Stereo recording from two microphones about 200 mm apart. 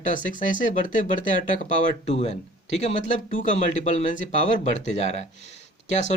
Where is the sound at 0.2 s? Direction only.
40° left (ahead or behind).